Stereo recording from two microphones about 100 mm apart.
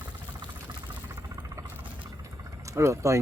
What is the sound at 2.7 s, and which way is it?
Speech, 30° right (ahead or behind).